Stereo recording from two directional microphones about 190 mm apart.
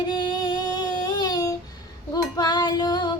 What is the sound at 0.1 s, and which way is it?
Child singing, 25° left (ahead or behind).